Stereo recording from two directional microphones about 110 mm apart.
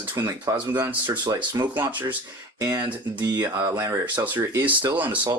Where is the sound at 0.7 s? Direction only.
20° right (ahead or behind).